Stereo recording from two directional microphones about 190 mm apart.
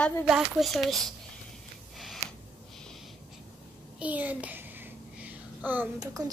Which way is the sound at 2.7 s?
Centre (ahead or behind).